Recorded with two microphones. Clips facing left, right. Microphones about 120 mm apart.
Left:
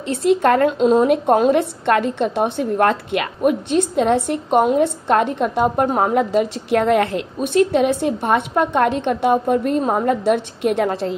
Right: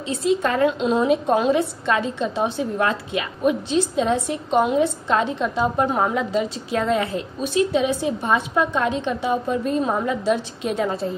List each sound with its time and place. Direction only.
0.1 s a woman's voice: 60° left (ahead or behind)